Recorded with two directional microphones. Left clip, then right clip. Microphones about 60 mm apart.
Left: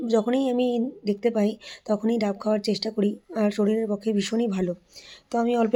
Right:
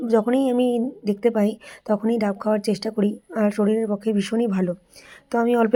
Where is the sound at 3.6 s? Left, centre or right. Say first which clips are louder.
Right 3 dB; centre.